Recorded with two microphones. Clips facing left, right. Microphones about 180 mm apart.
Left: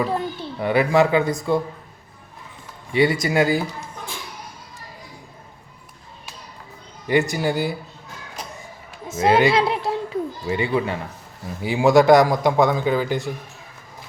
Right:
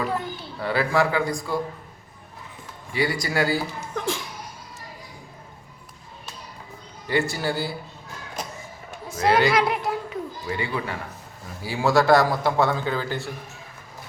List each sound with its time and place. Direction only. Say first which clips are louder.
0.6 s a man's voice: left 5 dB; 20° left (ahead or behind)
2.9 s a man's voice: left 6 dB; 25° left (ahead or behind)
3.9 s laughter: right 8 dB; 90° right
7.1 s a man's voice: left 4 dB; 15° left (ahead or behind)
9.0 s children playing: left 3 dB; 25° left (ahead or behind)
11.6 s a man's voice: left 5 dB; 20° left (ahead or behind)